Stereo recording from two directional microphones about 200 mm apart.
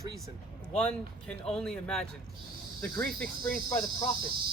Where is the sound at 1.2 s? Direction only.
5° left (ahead or behind).